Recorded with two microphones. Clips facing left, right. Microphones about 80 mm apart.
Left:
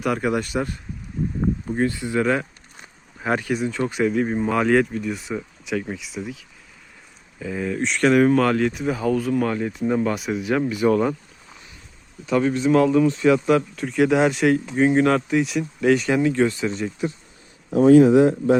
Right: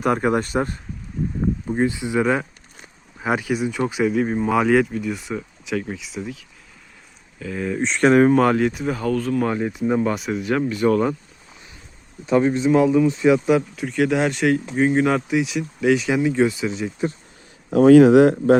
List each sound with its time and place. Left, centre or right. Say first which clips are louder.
0.0 s speech: right 3 dB; right
1.7 s speech: right 3 dB; centre
7.8 s speech: right 2 dB; right
8.3 s speech: right 2 dB; centre
9.4 s speech: right 1 dB; centre
12.2 s speech: right 2 dB; right
13.7 s speech: left 2 dB; centre
17.7 s speech: right 2 dB; right